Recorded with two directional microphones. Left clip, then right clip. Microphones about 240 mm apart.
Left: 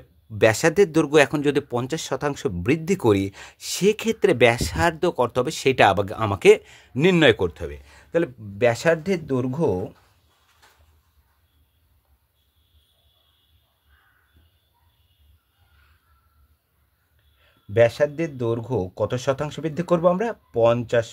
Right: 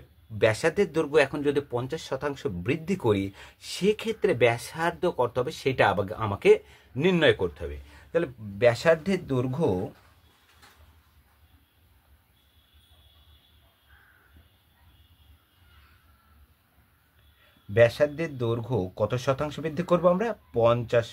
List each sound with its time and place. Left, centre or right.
0.4 s speech: left
17.7 s speech: left